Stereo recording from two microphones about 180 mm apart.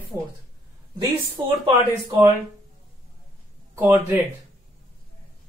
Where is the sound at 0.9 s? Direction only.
25° right (ahead or behind).